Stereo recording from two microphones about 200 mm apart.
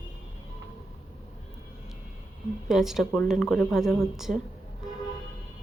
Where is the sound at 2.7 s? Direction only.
Centre (ahead or behind).